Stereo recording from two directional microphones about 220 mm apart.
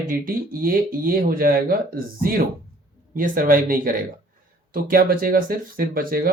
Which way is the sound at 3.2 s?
40° right (ahead or behind).